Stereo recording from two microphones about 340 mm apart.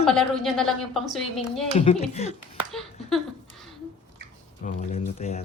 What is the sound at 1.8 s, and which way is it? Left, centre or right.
Speech, centre.